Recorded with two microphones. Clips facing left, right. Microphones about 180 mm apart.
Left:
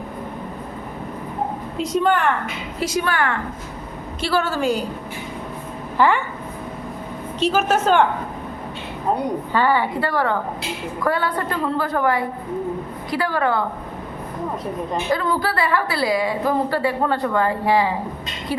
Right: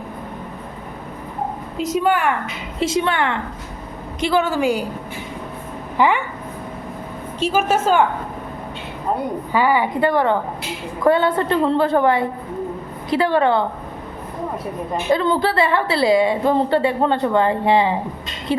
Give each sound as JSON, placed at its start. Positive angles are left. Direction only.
{"t": 1.8, "sound": "a woman's voice", "side_deg": -5}
{"t": 2.8, "sound": "a woman's voice", "side_deg": -25}
{"t": 6.0, "sound": "a woman's voice", "side_deg": -15}
{"t": 7.3, "sound": "a woman's voice", "side_deg": -10}
{"t": 9.5, "sound": "a woman's voice", "side_deg": -10}
{"t": 15.1, "sound": "a woman's voice", "side_deg": -25}